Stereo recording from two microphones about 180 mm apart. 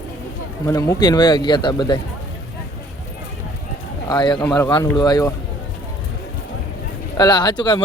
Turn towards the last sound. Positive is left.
turn(degrees=25)  # may be behind; listen again after turning